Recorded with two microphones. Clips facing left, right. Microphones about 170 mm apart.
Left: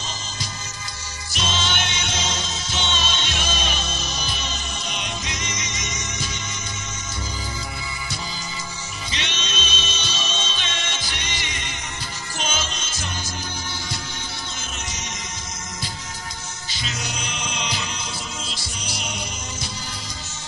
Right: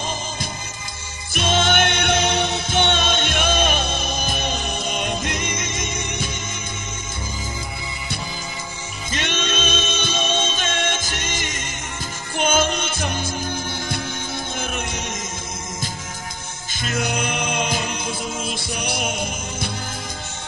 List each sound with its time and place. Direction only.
1.3 s music: 55° right (ahead or behind)
9.1 s music: 50° right (ahead or behind)
14.6 s music: 55° right (ahead or behind)
16.7 s chant: 55° right (ahead or behind)